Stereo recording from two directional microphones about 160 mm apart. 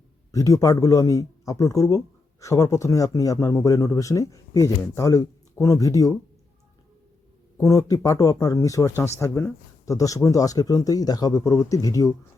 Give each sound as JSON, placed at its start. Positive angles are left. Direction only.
{"t": 0.3, "sound": "speech", "side_deg": 20}
{"t": 7.6, "sound": "speech", "side_deg": 20}